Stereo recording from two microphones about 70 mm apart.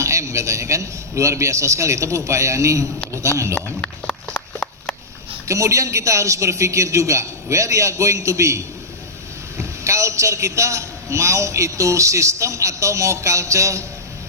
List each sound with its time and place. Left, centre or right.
0.0 s a man's voice: right
5.5 s a man's voice: right